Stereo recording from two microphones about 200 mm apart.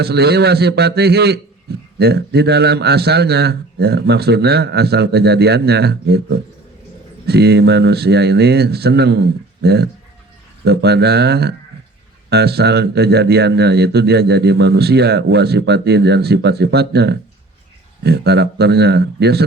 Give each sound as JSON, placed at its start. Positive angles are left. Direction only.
{"t": 0.0, "sound": "speech", "side_deg": -55}